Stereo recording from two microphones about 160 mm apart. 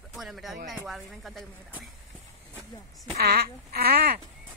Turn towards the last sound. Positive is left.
turn(degrees=-80)